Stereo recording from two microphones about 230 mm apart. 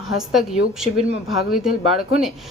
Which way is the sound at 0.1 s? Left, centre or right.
Centre.